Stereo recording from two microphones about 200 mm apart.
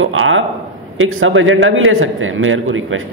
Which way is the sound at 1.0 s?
90° right.